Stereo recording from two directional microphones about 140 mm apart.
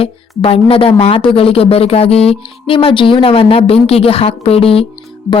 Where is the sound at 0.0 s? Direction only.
45° left (ahead or behind).